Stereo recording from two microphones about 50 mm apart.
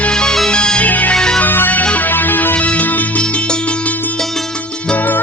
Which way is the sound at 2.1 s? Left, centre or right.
Left.